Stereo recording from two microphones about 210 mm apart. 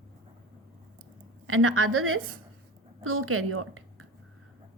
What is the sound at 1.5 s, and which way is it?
A woman's voice, 85° right.